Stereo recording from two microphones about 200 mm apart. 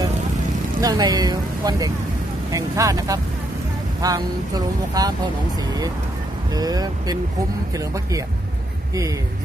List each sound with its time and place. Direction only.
0.7 s speech: 20° right (ahead or behind)
6.5 s speech: 20° right (ahead or behind)